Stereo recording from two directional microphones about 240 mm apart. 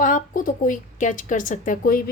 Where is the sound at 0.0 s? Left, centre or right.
Left.